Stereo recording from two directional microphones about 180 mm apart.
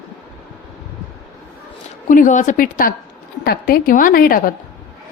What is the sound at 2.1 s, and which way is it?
A woman's voice, 45° left (ahead or behind).